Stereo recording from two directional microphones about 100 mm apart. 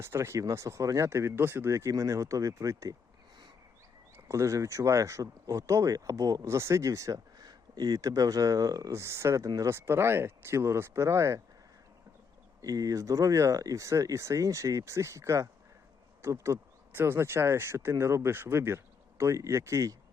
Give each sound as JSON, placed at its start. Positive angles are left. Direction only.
{"t": 0.0, "sound": "speech", "side_deg": -25}
{"t": 4.3, "sound": "speech", "side_deg": -30}
{"t": 12.6, "sound": "speech", "side_deg": -35}